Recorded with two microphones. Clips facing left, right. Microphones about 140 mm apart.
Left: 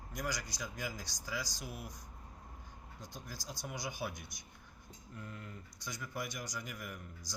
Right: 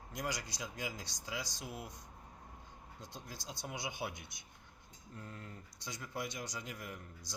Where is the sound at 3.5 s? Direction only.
25° right (ahead or behind).